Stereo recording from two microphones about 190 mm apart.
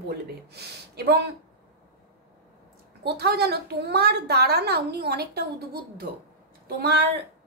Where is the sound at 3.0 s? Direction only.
60° right (ahead or behind).